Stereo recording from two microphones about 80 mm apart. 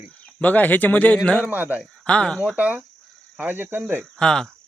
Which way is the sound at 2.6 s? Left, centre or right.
Centre.